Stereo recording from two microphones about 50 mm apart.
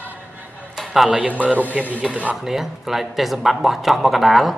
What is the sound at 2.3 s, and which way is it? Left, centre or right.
Speech, centre.